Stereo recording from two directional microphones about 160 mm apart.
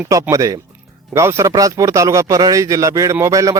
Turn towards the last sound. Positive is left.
turn(degrees=-20)  # may be behind; listen again after turning